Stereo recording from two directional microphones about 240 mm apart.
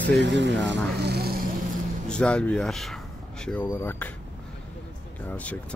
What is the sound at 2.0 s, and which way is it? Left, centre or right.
Speech, centre.